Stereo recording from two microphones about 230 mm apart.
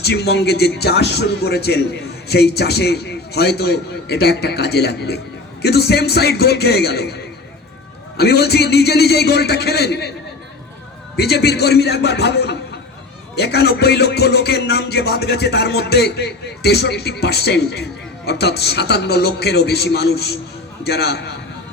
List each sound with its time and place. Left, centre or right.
0.0 s a man's voice: left
11.2 s a man's voice: left